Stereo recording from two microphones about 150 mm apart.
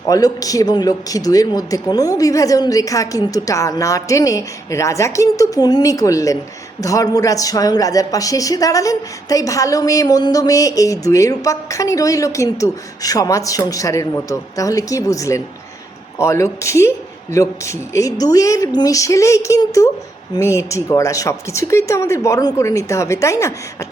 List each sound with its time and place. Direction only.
0.1 s speech: 25° left (ahead or behind)